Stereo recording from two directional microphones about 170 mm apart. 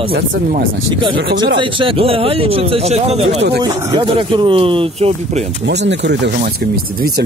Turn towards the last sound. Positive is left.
turn(degrees=-90)